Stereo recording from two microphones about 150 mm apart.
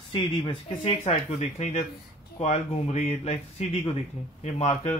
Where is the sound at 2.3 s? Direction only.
50° left (ahead or behind).